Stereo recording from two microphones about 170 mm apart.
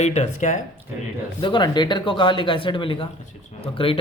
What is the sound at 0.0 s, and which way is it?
Speech, 45° left (ahead or behind).